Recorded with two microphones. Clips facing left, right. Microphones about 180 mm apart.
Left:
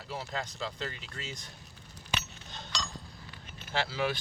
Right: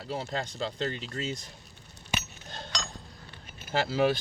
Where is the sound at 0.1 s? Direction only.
35° right (ahead or behind).